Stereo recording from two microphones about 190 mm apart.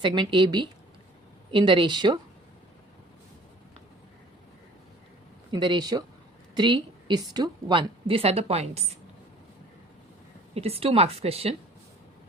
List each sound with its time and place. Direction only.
0.0 s a woman's voice: 25° right (ahead or behind)
5.5 s a woman's voice: 25° right (ahead or behind)
10.5 s a woman's voice: 30° right (ahead or behind)